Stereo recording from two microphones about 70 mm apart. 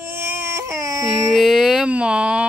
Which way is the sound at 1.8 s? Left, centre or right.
Centre.